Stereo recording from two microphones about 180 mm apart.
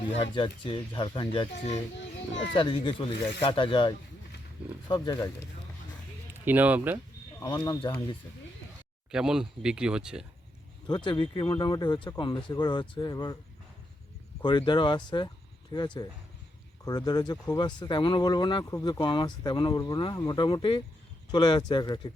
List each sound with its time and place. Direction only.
0.0 s speech: 30° left (ahead or behind)
2.0 s children playing: 80° left
2.6 s speech: 25° left (ahead or behind)
6.4 s speech: 10° right (ahead or behind)
7.3 s speech: 20° left (ahead or behind)
9.1 s speech: 5° right (ahead or behind)
10.8 s speech: 25° left (ahead or behind)
14.4 s speech: 25° left (ahead or behind)